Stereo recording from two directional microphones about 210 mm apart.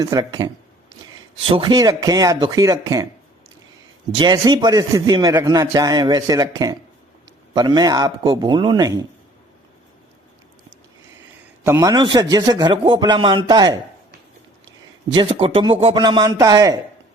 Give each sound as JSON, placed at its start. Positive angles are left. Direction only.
{"t": 0.0, "sound": "a man's voice", "side_deg": -20}
{"t": 4.2, "sound": "a man's voice", "side_deg": -20}
{"t": 11.6, "sound": "a man's voice", "side_deg": -15}
{"t": 15.1, "sound": "a man's voice", "side_deg": -25}